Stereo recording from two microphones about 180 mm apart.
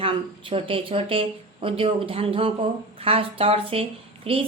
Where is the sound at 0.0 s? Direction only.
30° right (ahead or behind).